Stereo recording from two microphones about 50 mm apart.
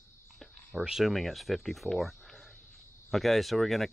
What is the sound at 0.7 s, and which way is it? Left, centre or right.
Speech, centre.